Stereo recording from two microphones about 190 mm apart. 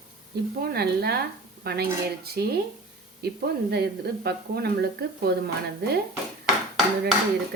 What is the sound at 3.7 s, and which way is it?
Speech, 60° right (ahead or behind).